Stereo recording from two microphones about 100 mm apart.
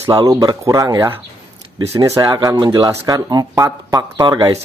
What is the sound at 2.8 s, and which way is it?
Speech, 35° right (ahead or behind).